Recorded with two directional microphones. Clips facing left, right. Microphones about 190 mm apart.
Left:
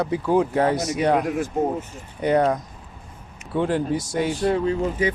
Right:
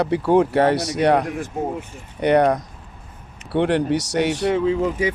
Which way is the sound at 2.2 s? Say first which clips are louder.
Right 3 dB; 70° right (ahead or behind).